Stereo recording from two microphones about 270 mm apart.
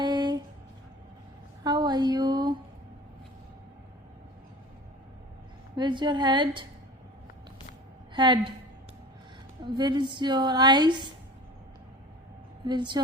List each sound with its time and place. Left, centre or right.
0.0 s music: centre
1.6 s a sound: centre
5.7 s a woman's voice: centre
8.1 s a woman's voice: centre
9.6 s a woman's voice: centre
12.6 s a woman's voice: centre